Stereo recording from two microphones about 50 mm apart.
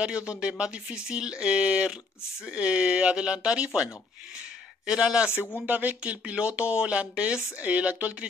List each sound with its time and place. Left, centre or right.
0.0 s speech: right
5.3 s speech: left
5.7 s speech: right